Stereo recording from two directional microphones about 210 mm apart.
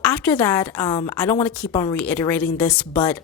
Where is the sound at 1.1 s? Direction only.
5° left (ahead or behind).